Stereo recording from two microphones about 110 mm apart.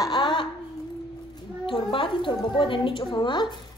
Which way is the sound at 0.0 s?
45° left (ahead or behind).